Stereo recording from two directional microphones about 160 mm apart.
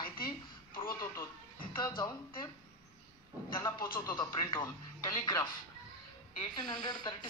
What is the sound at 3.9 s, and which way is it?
Speech, 20° left (ahead or behind).